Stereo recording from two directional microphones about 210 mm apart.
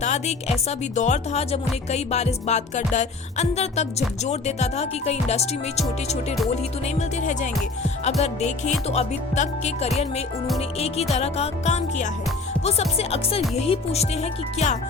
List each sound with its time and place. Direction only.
0.0 s a woman's voice: 30° left (ahead or behind)